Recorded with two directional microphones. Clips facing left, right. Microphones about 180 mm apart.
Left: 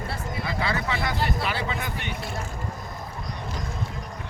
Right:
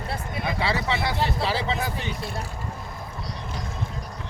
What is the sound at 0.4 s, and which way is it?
Speech, 30° right (ahead or behind).